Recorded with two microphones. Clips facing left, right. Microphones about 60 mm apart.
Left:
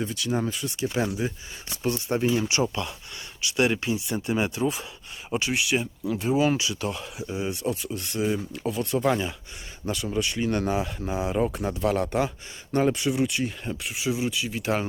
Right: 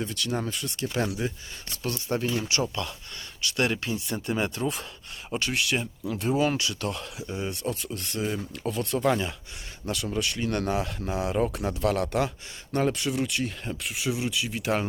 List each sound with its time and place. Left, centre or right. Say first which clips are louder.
0.0 s speech: left 3 dB; centre
1.7 s speech: left 3 dB; centre
2.2 s speech: left 7 dB; centre